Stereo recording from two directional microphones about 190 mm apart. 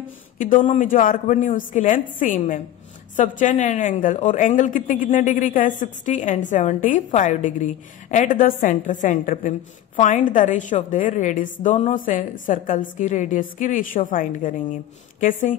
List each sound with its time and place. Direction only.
0.4 s a woman's voice: 45° left (ahead or behind)